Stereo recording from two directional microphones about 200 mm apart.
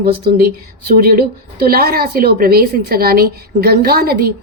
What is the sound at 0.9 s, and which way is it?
A woman's voice, 45° right (ahead or behind).